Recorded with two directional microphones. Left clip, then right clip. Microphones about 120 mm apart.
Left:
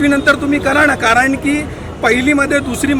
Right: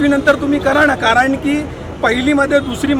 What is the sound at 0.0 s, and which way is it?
Speech, 5° left (ahead or behind).